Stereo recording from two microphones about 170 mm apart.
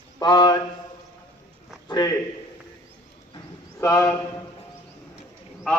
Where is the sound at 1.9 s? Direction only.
25° left (ahead or behind).